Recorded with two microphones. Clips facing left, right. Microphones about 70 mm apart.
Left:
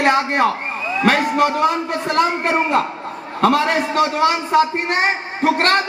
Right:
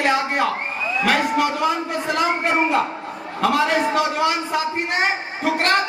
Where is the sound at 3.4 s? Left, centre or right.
Left.